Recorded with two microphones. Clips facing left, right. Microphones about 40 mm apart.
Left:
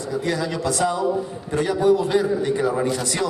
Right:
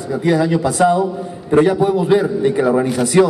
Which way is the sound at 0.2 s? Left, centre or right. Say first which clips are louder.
Right 11 dB; right.